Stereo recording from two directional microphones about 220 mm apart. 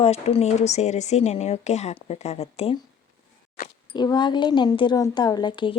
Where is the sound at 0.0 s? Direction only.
25° left (ahead or behind).